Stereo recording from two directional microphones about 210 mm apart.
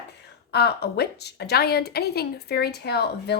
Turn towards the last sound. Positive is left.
turn(degrees=50)  # may be behind; listen again after turning